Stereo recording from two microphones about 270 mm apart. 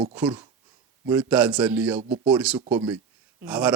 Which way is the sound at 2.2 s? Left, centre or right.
Centre.